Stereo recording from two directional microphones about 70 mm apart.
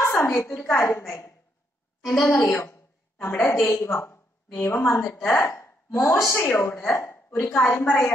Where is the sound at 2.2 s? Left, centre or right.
Left.